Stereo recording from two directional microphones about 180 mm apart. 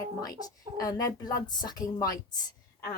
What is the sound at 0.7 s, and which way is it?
A woman's voice, 20° left (ahead or behind).